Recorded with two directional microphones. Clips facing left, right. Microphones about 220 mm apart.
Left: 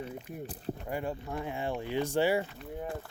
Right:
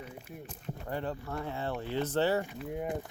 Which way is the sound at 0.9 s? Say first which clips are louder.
Right 1 dB; 10° left (ahead or behind).